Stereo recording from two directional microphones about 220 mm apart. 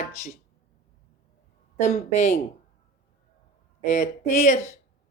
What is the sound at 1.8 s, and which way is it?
Speech, 30° left (ahead or behind).